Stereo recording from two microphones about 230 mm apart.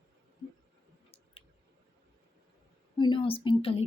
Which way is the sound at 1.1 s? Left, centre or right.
Left.